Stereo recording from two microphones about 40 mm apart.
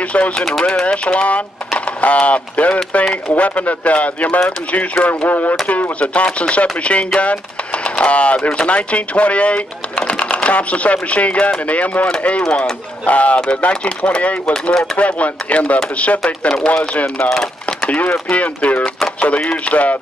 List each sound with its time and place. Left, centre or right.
0.1 s speech: left
0.6 s speech: centre
0.8 s speech: left
5.3 s speech: left
5.7 s speech: left
12.4 s speech: centre
13.0 s speech: left
14.5 s speech: centre
15.0 s speech: left
17.4 s a sound: left
17.8 s speech: left